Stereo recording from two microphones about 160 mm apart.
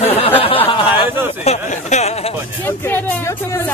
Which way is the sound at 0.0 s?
35° left (ahead or behind).